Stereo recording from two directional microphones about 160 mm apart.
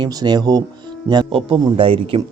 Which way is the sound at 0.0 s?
25° right (ahead or behind).